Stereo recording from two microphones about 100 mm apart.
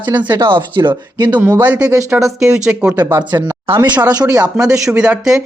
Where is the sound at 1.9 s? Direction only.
30° right (ahead or behind).